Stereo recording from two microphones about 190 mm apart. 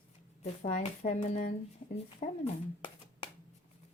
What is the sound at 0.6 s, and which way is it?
Speech, 30° left (ahead or behind).